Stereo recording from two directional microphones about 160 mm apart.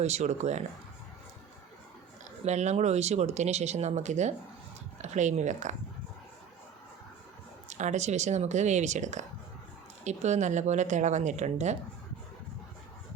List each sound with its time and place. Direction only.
0.0 s speech: 45° right (ahead or behind)
2.4 s speech: 45° right (ahead or behind)
7.7 s speech: 45° right (ahead or behind)